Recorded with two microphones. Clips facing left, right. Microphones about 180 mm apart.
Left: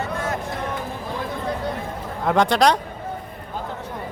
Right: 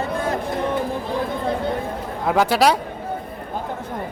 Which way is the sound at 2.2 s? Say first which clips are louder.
Even; 5° right (ahead or behind).